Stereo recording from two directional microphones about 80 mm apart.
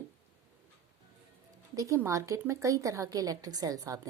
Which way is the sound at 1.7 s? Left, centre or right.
Right.